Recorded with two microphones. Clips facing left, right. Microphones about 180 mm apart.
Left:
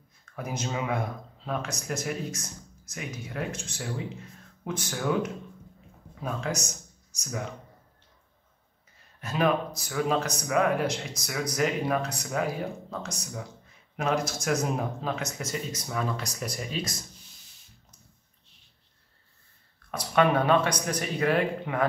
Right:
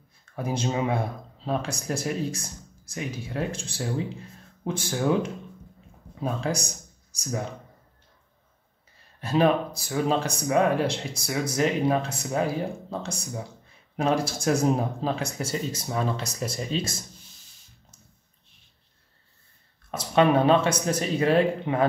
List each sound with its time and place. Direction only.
0.2 s speech: 30° right (ahead or behind)
9.2 s speech: 30° right (ahead or behind)
19.9 s speech: 25° right (ahead or behind)